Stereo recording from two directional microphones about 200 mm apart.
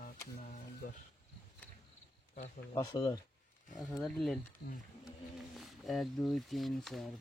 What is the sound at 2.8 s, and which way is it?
Speech, 20° left (ahead or behind).